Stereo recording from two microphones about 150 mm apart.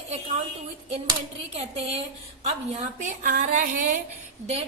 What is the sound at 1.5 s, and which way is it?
A woman's voice, 45° right (ahead or behind).